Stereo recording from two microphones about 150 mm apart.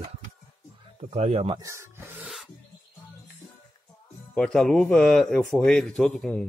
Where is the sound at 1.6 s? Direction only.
20° right (ahead or behind).